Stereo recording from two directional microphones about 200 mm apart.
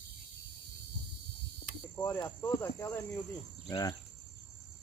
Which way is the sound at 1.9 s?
15° left (ahead or behind).